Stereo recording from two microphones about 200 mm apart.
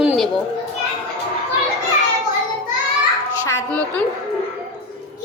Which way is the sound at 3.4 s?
15° left (ahead or behind).